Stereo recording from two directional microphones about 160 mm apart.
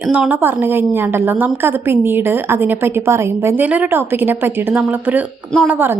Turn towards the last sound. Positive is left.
turn(degrees=-10)  # may be behind; listen again after turning